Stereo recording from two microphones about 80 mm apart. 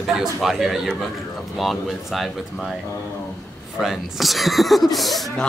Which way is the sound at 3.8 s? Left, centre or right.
Centre.